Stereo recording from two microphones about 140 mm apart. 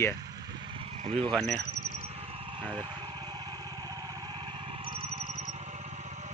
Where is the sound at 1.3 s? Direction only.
Centre (ahead or behind).